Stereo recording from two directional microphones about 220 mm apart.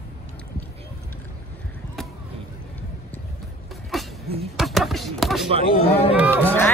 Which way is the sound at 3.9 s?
Centre (ahead or behind).